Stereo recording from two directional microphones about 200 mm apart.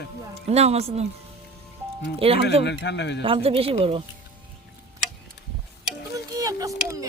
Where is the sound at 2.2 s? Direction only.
30° right (ahead or behind).